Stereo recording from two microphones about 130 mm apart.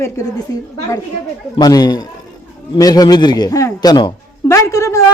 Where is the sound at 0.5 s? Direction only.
25° left (ahead or behind).